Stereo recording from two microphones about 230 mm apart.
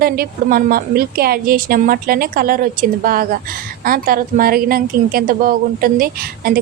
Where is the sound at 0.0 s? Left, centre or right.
Right.